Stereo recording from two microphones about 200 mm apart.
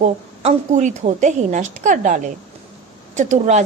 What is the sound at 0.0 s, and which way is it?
A woman's voice, 35° right (ahead or behind).